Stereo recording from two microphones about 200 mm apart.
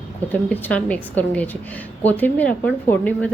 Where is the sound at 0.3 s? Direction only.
10° left (ahead or behind).